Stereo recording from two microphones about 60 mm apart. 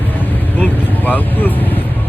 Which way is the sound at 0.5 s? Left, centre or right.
Left.